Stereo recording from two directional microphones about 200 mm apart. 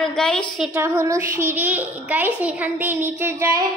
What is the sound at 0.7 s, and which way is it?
A child's voice, 15° right (ahead or behind).